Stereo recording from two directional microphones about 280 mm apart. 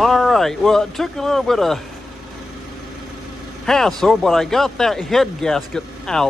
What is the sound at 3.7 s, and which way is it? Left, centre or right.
Speech, centre.